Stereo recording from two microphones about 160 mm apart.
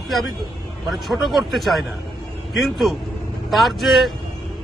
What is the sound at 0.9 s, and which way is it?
A man's voice, centre (ahead or behind).